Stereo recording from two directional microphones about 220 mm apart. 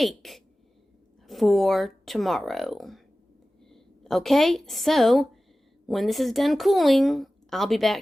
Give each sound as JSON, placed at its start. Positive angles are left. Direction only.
{"t": 0.0, "sound": "a woman's voice", "side_deg": 0}